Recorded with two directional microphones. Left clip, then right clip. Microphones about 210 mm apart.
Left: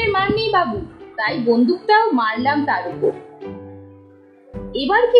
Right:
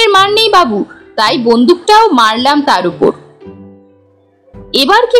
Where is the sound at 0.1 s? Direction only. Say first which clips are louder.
Right 10 dB; 30° right (ahead or behind).